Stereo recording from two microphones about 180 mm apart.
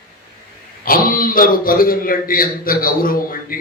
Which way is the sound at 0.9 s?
50° left (ahead or behind).